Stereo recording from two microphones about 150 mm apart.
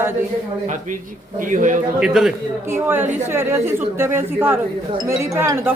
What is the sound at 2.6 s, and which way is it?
A woman's voice, 15° right (ahead or behind).